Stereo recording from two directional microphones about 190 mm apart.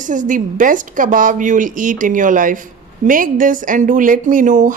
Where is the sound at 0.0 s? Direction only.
45° right (ahead or behind).